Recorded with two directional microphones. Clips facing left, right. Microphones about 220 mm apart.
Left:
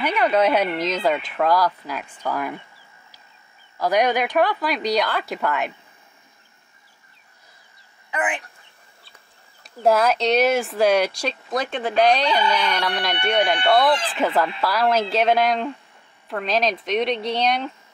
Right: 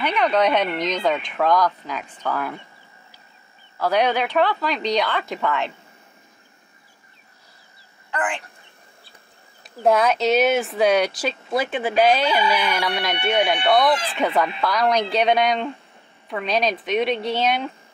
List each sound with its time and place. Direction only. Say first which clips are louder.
0.0 s speech: left 1 dB; 5° left (ahead or behind)
3.7 s speech: even; 15° left (ahead or behind)
8.1 s speech: left 1 dB; 20° left (ahead or behind)
9.6 s speech: even; centre (ahead or behind)